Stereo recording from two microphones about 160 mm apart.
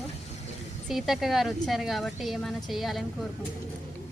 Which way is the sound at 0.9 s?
Centre (ahead or behind).